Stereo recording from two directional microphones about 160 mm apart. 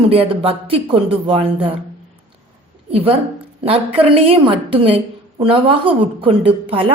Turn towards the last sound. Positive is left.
turn(degrees=-35)  # may be behind; listen again after turning